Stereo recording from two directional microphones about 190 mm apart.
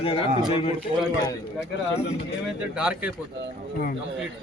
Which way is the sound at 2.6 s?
5° right (ahead or behind).